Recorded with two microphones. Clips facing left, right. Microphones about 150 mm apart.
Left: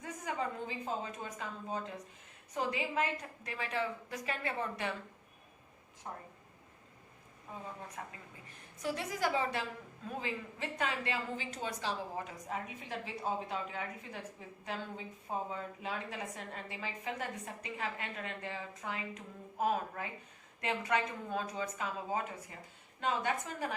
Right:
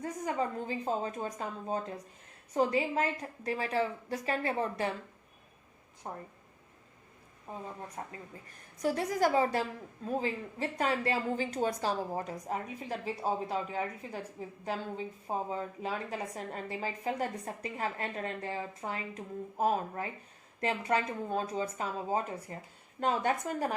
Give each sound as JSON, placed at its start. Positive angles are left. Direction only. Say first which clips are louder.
{"t": 0.0, "sound": "a woman's voice", "louder": "right 5 dB", "side_deg": -40}
{"t": 6.0, "sound": "a woman's voice", "louder": "right 4 dB", "side_deg": -35}
{"t": 8.0, "sound": "a woman's voice", "louder": "right 4 dB", "side_deg": -30}
{"t": 8.4, "sound": "a woman's voice", "louder": "right 6 dB", "side_deg": -45}